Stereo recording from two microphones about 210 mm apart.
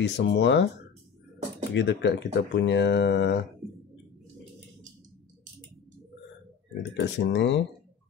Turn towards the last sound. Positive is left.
turn(degrees=55)  # may be behind; listen again after turning